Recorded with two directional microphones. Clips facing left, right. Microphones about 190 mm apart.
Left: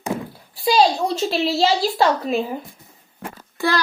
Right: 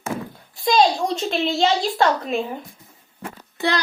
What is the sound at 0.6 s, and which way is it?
A child's voice, 5° left (ahead or behind).